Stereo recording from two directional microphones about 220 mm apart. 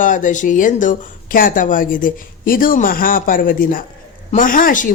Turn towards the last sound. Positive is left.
turn(degrees=35)  # may be behind; listen again after turning